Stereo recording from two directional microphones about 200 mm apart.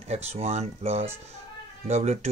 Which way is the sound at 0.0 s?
30° right (ahead or behind).